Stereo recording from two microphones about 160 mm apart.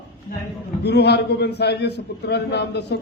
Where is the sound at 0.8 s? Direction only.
90° left.